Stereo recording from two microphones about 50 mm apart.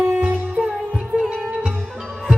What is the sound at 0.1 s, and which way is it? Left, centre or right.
Music, right.